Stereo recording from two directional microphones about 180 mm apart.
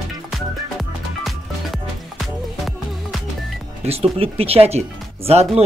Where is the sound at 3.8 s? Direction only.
35° right (ahead or behind).